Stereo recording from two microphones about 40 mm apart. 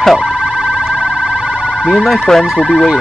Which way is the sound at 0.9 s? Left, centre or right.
Right.